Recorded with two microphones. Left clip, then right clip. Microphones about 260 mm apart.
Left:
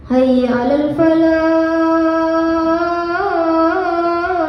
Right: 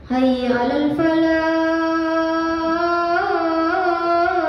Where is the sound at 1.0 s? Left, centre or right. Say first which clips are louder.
Left 5 dB; centre.